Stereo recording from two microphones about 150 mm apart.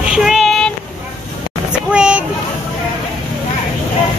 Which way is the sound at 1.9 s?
5° right (ahead or behind).